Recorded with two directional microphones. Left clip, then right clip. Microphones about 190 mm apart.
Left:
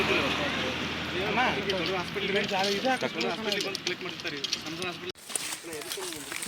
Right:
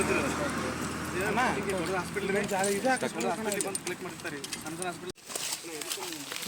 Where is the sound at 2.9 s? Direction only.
30° right (ahead or behind).